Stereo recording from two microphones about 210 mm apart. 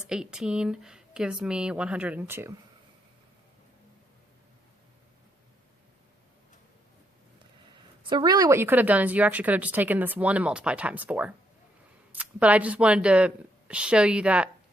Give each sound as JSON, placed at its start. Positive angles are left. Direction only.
{"t": 0.1, "sound": "speech", "side_deg": -5}
{"t": 7.7, "sound": "a woman's voice", "side_deg": -20}